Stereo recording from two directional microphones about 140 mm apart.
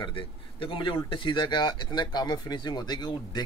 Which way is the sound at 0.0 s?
40° left (ahead or behind).